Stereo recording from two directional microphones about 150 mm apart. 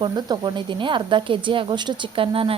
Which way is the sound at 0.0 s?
30° right (ahead or behind).